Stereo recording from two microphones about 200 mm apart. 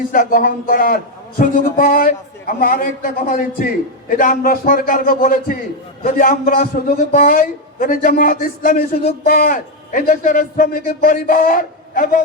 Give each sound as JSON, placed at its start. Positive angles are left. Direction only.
{"t": 0.1, "sound": "a man's voice", "side_deg": 45}